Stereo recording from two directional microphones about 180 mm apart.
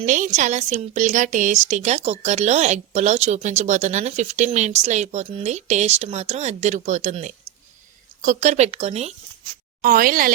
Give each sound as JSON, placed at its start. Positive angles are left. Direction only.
{"t": 0.0, "sound": "a woman's voice", "side_deg": -45}
{"t": 9.8, "sound": "speech", "side_deg": -50}